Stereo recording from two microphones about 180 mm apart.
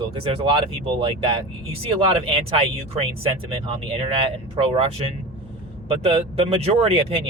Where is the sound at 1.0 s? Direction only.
30° right (ahead or behind).